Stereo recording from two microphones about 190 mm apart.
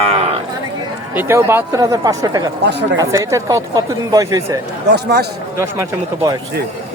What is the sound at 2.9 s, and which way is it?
Speech, 15° right (ahead or behind).